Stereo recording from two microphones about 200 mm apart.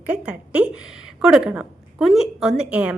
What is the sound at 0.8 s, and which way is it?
Speech, 80° left.